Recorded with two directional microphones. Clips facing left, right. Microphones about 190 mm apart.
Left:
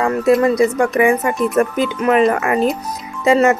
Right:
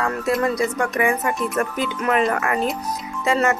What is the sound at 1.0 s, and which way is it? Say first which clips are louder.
A woman's voice: left 6 dB; 20° left (ahead or behind).